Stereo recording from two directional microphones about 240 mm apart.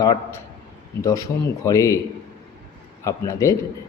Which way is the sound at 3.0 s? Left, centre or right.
Centre.